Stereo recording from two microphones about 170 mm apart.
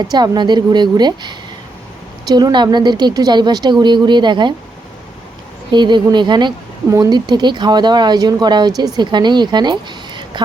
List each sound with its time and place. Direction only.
0.0 s speech: 25° right (ahead or behind)
5.7 s speech: 25° right (ahead or behind)